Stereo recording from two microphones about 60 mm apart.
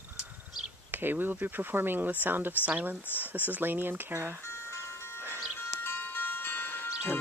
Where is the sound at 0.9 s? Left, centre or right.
Right.